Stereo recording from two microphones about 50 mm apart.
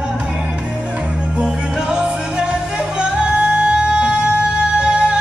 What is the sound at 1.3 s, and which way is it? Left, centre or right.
Music, centre.